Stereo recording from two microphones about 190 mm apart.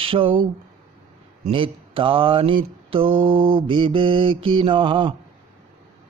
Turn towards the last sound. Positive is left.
turn(degrees=-25)  # may be behind; listen again after turning